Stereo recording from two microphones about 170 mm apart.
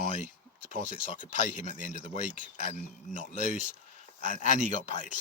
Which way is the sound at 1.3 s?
50° left (ahead or behind).